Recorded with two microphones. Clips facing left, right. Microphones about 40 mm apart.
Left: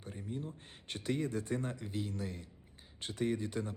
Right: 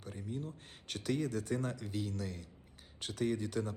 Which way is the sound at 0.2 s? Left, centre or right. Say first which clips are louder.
Even; left.